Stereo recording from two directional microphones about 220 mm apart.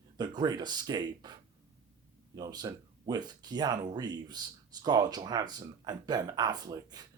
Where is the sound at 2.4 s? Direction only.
20° right (ahead or behind).